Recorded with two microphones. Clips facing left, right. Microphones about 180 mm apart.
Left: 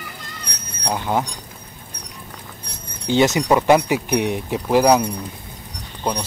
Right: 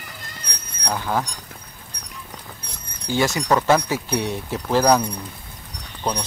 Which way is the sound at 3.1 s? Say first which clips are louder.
Left 4 dB; 20° left (ahead or behind).